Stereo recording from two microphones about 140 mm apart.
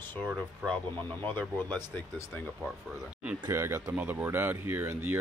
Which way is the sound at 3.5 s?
20° right (ahead or behind).